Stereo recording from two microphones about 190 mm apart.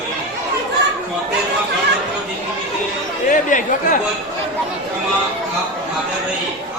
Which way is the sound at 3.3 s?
45° left (ahead or behind).